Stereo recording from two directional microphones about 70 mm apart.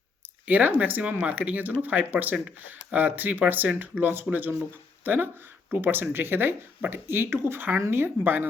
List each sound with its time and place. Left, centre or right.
0.4 s speech: right